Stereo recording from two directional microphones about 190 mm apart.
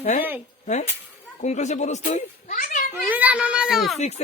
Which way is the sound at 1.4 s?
40° left (ahead or behind).